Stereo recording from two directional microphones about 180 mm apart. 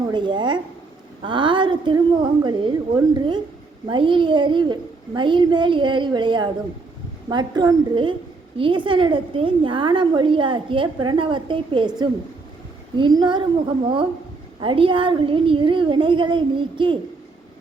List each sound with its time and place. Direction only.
0.0 s a woman's voice: 25° right (ahead or behind)
13.0 s a woman's voice: 25° right (ahead or behind)